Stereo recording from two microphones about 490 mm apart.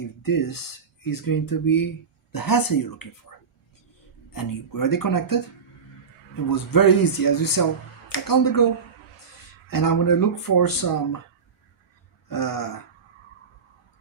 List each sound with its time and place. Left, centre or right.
0.0 s speech: left
6.5 s speech: left
9.6 s speech: left
12.3 s speech: left